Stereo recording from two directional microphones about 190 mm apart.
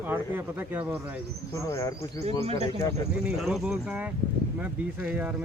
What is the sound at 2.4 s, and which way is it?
Speech, 30° right (ahead or behind).